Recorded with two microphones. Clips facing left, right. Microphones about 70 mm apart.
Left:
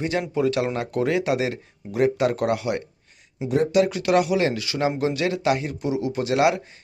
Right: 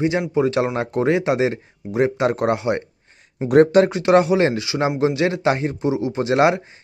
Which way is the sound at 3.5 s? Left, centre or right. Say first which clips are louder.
Right 8 dB; right.